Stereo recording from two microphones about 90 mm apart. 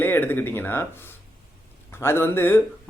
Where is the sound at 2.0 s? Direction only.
25° left (ahead or behind).